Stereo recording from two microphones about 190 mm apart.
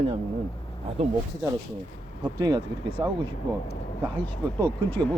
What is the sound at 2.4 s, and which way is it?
Speech, 20° right (ahead or behind).